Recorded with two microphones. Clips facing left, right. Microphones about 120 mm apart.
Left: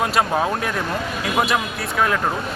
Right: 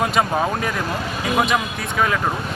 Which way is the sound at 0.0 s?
Centre (ahead or behind).